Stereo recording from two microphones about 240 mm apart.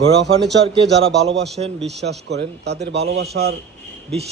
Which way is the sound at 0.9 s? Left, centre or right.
Right.